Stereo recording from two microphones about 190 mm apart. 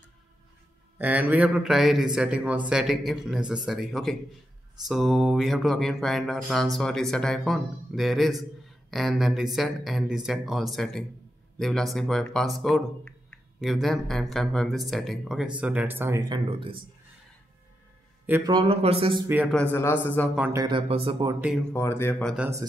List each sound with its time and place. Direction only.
0.9 s speech: 10° right (ahead or behind); by 16.8 s 30° right (ahead or behind)
18.4 s speech: 25° right (ahead or behind)
19.2 s speech: 10° right (ahead or behind)
19.5 s a man's voice: 10° left (ahead or behind)
20.3 s speech: 10° right (ahead or behind)
20.6 s speech: 25° right (ahead or behind)
21.7 s a man's voice: 15° left (ahead or behind)
22.3 s speech: 5° right (ahead or behind)